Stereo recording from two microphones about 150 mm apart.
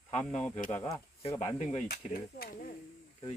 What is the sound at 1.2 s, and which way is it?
Speech, 45° left (ahead or behind).